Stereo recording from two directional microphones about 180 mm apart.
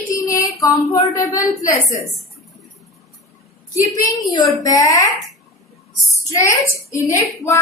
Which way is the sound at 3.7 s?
20° left (ahead or behind).